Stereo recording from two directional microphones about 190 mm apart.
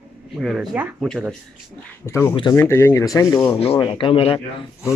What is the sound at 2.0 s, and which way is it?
Speech, 15° left (ahead or behind).